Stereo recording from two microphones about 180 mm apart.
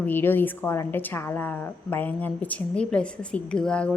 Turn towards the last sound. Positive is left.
turn(degrees=5)  # may be behind; listen again after turning